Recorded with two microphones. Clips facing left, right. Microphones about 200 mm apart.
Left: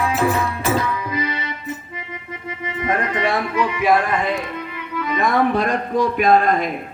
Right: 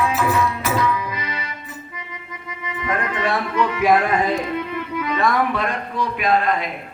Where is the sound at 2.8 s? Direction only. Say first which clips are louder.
Left 2 dB; 20° left (ahead or behind).